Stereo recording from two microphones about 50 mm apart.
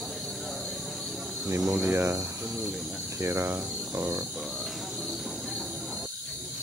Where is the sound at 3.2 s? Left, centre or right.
Right.